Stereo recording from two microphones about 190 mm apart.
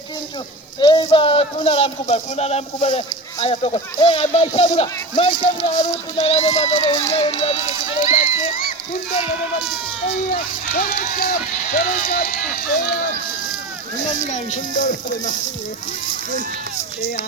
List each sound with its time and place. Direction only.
0.8 s speech: 25° left (ahead or behind)
10.3 s speech: 45° left (ahead or behind)